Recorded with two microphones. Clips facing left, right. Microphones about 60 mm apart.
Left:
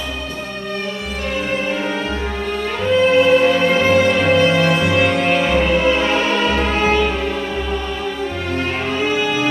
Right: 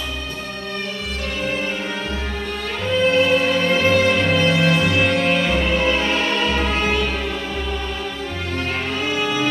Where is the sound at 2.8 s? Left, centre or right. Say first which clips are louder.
Left 4 dB; centre.